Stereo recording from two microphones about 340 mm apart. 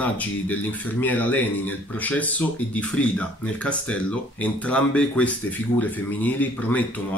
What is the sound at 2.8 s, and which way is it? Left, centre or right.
Speech, centre.